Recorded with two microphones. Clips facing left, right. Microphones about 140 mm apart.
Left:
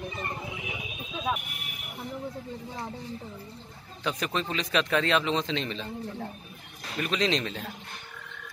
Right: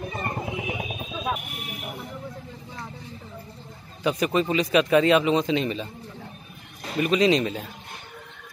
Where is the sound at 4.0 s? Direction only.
10° right (ahead or behind).